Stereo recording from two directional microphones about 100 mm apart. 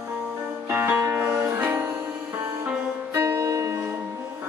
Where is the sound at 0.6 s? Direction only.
20° right (ahead or behind).